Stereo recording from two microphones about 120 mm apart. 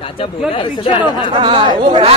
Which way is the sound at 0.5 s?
45° left (ahead or behind).